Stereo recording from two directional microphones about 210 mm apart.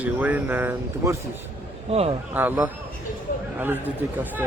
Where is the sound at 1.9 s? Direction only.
30° right (ahead or behind).